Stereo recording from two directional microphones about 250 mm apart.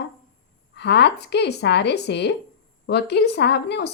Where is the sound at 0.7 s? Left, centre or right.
Left.